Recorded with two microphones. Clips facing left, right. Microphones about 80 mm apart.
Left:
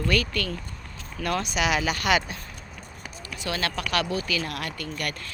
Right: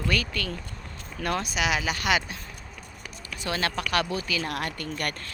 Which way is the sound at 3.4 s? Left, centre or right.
Right.